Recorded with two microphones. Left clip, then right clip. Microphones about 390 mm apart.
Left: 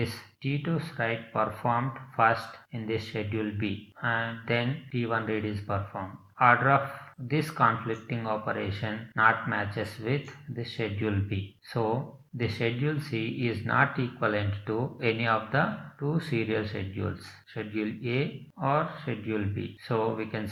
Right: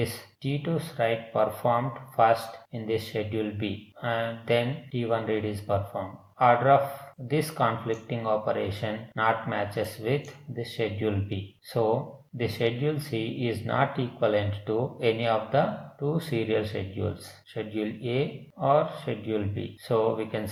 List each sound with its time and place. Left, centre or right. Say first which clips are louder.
0.0 s speech: right 2 dB; right